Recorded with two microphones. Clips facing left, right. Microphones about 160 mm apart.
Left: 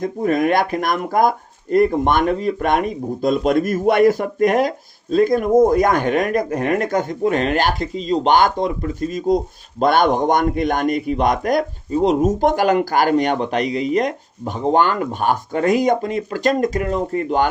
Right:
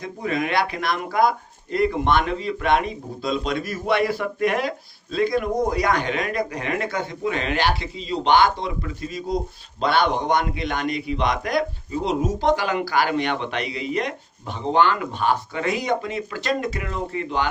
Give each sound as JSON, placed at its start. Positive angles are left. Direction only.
{"t": 0.0, "sound": "speech", "side_deg": 50}